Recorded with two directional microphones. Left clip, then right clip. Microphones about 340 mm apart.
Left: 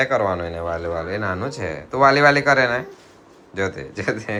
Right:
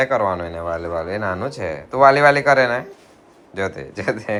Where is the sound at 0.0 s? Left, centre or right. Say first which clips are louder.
Right 1 dB; centre.